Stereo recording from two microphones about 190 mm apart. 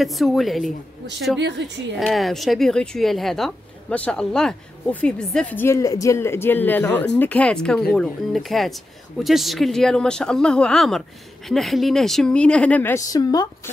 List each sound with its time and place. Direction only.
0.0 s speech: centre (ahead or behind)
1.6 s a woman's voice: 65° right (ahead or behind)
2.0 s speech: centre (ahead or behind); by 13.5 s 20° left (ahead or behind)